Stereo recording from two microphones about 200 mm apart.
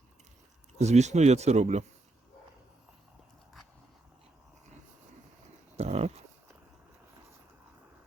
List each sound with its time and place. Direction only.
0.8 s speech: 35° right (ahead or behind)
5.7 s dog: 30° right (ahead or behind)